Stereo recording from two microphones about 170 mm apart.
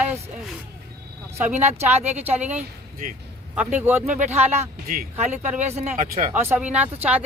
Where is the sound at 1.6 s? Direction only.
40° right (ahead or behind).